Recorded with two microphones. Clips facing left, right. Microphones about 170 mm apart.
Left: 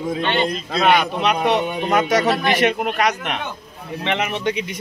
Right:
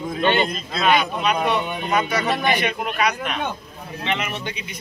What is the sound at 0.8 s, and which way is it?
Speech, 75° left (ahead or behind).